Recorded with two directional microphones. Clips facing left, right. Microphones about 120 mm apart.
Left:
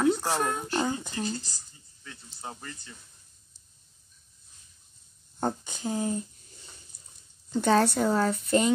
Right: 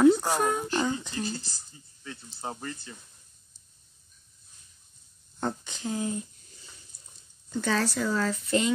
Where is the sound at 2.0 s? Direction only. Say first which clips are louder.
Right 4 dB; 25° right (ahead or behind).